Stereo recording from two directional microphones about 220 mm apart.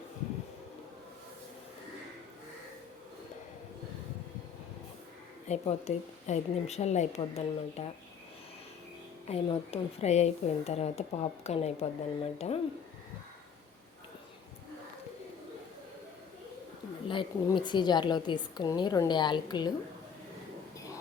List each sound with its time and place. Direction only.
5.5 s a woman's voice: 30° left (ahead or behind)
9.2 s a woman's voice: 25° left (ahead or behind)
17.1 s a woman's voice: 20° left (ahead or behind)